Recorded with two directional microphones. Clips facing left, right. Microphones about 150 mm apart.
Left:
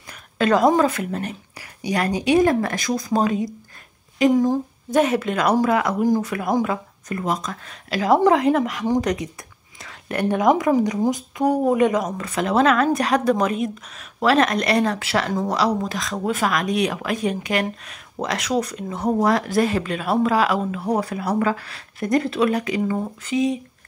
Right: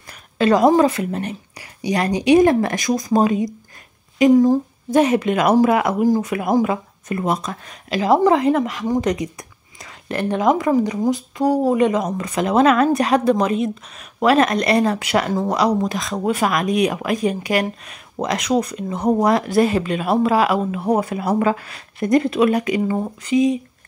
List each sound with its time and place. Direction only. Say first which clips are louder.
0.4 s speech: right 3 dB; 5° right (ahead or behind)
1.6 s a sound: right 2 dB; 15° right (ahead or behind)
2.2 s speech: right 5 dB; 15° right (ahead or behind)
6.4 s speech: right 3 dB; 5° right (ahead or behind)
6.7 s speech: right 3 dB; 25° right (ahead or behind)
7.9 s speech: right 1 dB; 10° right (ahead or behind)
22.1 s speech: right 4 dB; 5° right (ahead or behind)
22.4 s speech: right 3 dB; 20° right (ahead or behind)